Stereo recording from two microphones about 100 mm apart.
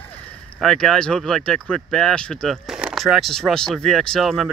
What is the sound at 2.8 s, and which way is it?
Speech, 5° right (ahead or behind).